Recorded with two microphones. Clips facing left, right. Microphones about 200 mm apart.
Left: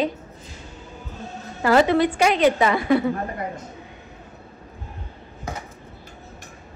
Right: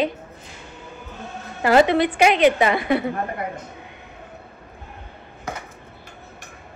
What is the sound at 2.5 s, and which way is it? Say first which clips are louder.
A woman's voice: left 1 dB; 70° right (ahead or behind).